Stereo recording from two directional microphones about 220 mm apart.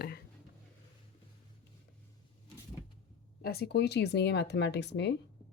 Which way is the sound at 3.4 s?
45° left (ahead or behind).